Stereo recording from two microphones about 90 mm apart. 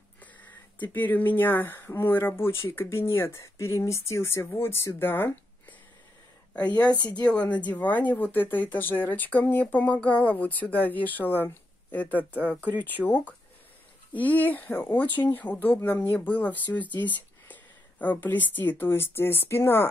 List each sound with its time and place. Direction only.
0.9 s speech: 20° left (ahead or behind)
7.2 s speech: 15° left (ahead or behind)